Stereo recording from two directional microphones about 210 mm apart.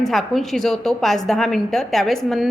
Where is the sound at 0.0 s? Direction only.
Centre (ahead or behind).